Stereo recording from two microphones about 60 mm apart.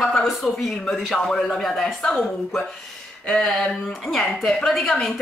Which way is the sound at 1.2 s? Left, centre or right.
Centre.